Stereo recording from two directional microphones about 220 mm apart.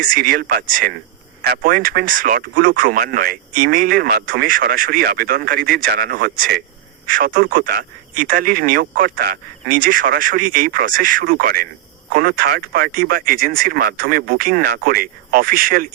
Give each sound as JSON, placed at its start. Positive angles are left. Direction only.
{"t": 0.0, "sound": "speech", "side_deg": -40}